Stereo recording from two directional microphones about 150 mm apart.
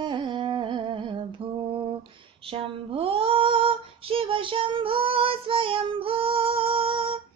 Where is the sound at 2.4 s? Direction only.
35° right (ahead or behind).